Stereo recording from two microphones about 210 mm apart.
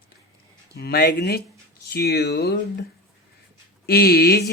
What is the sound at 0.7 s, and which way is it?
Speech, 50° left (ahead or behind).